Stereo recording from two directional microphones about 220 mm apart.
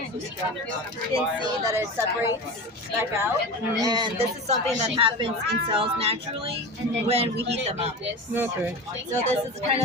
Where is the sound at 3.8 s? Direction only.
20° right (ahead or behind).